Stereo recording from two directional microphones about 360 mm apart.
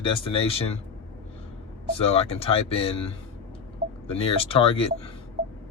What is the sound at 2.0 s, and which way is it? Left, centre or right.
Speech, centre.